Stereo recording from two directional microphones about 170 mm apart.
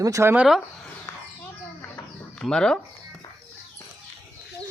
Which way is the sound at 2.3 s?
5° left (ahead or behind).